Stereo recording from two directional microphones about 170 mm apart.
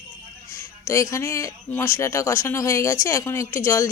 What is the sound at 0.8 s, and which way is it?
Speech, 15° left (ahead or behind).